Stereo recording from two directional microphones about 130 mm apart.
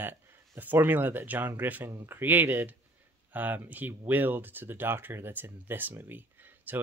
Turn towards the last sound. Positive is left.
turn(degrees=-15)  # may be behind; listen again after turning